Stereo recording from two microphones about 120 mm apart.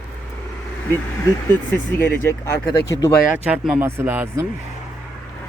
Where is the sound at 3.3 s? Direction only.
10° right (ahead or behind).